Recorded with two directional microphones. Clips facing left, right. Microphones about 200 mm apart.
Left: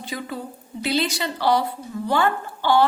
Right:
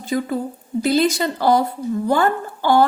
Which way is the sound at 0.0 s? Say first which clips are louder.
Right 9 dB; 45° right (ahead or behind).